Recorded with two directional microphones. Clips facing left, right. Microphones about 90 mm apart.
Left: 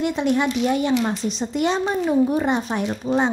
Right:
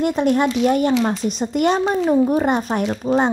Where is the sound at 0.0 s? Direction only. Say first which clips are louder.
Right 3 dB; 45° right (ahead or behind).